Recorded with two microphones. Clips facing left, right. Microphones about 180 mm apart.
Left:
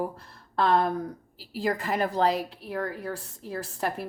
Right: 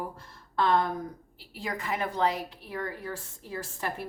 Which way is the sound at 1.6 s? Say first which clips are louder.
Left 6 dB; 40° left (ahead or behind).